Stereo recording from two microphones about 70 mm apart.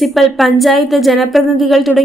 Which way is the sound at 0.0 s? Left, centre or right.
Centre.